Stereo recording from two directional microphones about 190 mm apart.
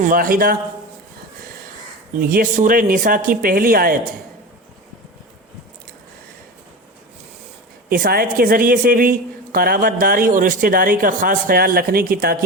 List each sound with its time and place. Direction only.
0.0 s speech: 45° right (ahead or behind)
2.1 s speech: 45° right (ahead or behind)
7.9 s speech: 50° right (ahead or behind)